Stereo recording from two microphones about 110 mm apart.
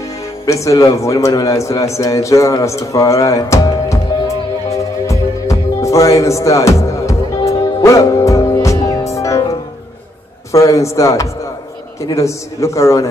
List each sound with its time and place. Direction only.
0.5 s a man's voice: 30° left (ahead or behind)
5.0 s music: 30° left (ahead or behind)
10.5 s a man's voice: 30° left (ahead or behind)